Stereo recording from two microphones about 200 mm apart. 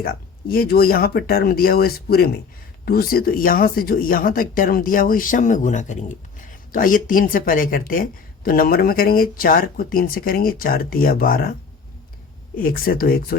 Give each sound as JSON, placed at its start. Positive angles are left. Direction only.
{"t": 0.0, "sound": "speech", "side_deg": 50}
{"t": 12.5, "sound": "speech", "side_deg": 45}